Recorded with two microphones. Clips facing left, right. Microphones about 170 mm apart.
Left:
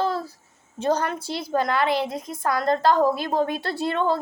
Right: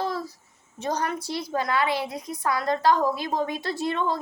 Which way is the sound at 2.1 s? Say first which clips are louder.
Left 2 dB; 25° left (ahead or behind).